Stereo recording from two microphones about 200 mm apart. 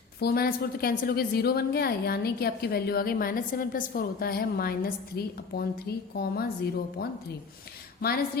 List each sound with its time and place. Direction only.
0.2 s a woman's voice: 50° left (ahead or behind)